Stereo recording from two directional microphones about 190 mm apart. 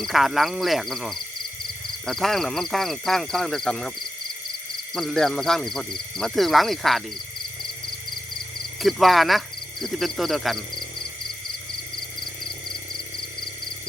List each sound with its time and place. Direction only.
0.0 s speech: centre (ahead or behind)
4.9 s speech: centre (ahead or behind)
8.8 s speech: centre (ahead or behind)